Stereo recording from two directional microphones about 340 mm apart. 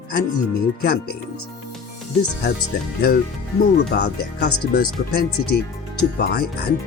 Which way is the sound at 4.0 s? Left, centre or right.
Left.